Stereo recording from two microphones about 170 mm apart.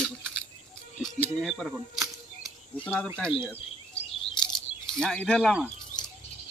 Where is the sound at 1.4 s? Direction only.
Centre (ahead or behind).